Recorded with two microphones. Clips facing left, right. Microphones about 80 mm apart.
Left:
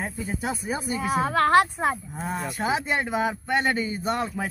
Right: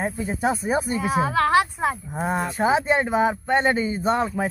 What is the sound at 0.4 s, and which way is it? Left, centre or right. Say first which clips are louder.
Speech: right 9 dB; right.